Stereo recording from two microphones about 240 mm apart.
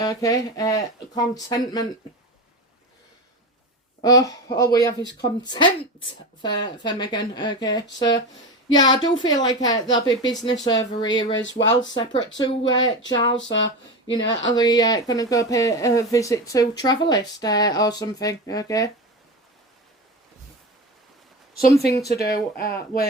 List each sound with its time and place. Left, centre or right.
0.0 s speech: centre
4.0 s speech: centre
14.5 s speech: centre
22.2 s speech: left